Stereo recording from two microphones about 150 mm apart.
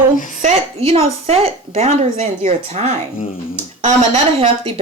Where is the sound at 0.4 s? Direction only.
40° right (ahead or behind).